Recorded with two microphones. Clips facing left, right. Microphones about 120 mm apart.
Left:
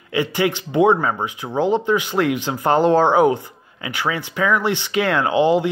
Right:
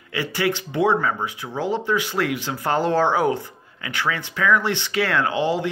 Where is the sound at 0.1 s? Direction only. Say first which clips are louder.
Left 4 dB; 20° left (ahead or behind).